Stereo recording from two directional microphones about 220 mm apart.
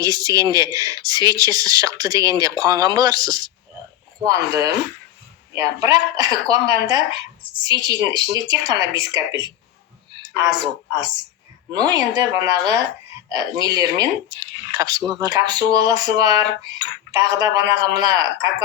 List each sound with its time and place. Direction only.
0.0 s a woman's voice: 15° right (ahead or behind)